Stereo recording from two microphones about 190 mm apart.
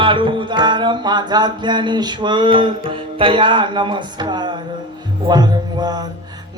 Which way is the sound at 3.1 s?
25° right (ahead or behind).